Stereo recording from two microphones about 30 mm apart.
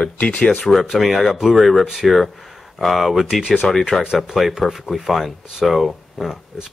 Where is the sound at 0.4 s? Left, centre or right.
Left.